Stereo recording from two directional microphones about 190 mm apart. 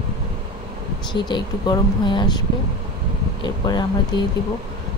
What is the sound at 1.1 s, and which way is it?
Speech, 25° left (ahead or behind).